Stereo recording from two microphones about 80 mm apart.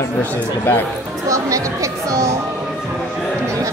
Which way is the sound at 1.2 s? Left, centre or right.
Right.